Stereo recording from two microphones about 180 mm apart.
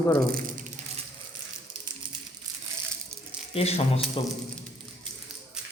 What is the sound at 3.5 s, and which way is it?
Speech, 35° left (ahead or behind).